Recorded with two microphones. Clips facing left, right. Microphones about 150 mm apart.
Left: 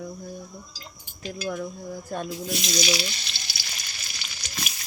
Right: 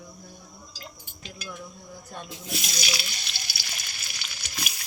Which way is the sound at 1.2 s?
60° left (ahead or behind).